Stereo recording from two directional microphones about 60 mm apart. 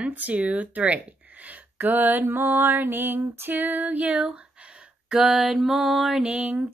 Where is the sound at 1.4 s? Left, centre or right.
Right.